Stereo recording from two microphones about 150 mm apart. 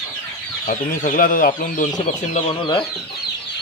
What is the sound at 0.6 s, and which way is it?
Speech, 65° left (ahead or behind).